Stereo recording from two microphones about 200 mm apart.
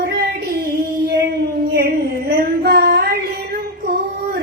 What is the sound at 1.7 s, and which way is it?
Female singing, 50° right (ahead or behind).